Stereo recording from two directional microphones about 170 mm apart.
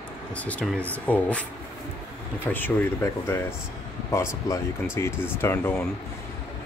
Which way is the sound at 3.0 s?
20° left (ahead or behind).